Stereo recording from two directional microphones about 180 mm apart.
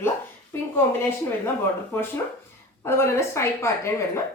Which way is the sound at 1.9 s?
10° left (ahead or behind).